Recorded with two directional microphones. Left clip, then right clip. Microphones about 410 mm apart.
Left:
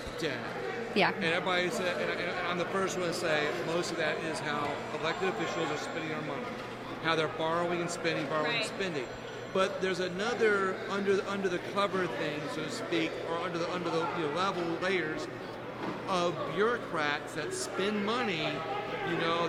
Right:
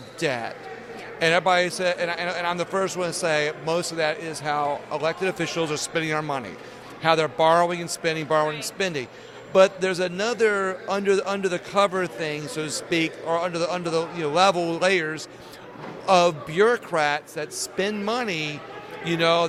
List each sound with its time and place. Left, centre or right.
0.2 s a man's voice: right
7.0 s a man's voice: right